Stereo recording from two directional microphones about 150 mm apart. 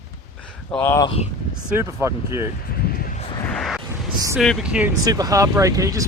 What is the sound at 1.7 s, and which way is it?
Speech, 20° right (ahead or behind).